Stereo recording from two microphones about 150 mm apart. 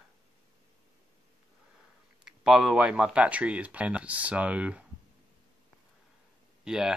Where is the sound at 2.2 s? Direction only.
5° right (ahead or behind).